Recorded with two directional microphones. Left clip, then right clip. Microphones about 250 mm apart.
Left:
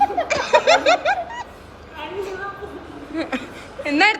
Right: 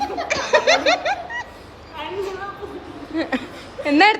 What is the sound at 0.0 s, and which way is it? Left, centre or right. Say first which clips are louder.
Laughter: left 4 dB; centre.